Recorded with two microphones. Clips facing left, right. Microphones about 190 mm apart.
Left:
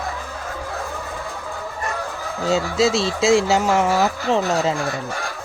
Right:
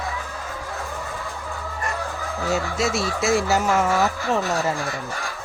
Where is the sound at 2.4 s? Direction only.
25° left (ahead or behind).